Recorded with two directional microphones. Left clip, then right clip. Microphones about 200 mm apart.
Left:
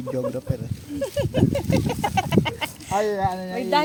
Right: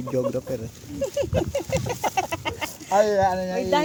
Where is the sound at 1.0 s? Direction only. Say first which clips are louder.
Left 1 dB; 30° left (ahead or behind).